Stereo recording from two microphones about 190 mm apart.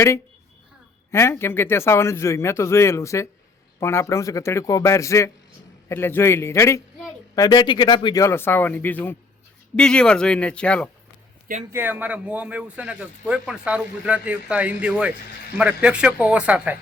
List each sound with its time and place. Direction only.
1.1 s speech: 15° left (ahead or behind)
11.7 s speech: 10° right (ahead or behind)